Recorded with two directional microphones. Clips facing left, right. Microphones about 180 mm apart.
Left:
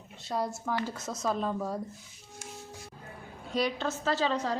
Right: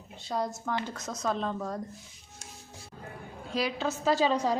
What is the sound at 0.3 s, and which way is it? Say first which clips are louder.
Speech: even; 5° left (ahead or behind).